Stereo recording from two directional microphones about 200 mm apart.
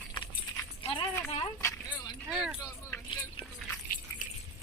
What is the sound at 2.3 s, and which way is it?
Keys jangling, 5° right (ahead or behind).